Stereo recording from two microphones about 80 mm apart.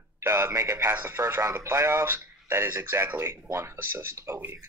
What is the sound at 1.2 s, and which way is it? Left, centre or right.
A man's voice, right.